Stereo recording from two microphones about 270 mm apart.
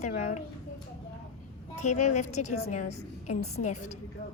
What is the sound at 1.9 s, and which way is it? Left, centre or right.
A woman's voice, left.